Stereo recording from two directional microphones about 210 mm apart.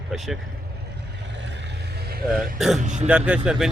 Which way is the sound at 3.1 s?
5° right (ahead or behind).